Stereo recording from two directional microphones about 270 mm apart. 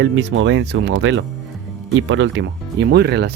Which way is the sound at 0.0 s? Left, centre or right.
Right.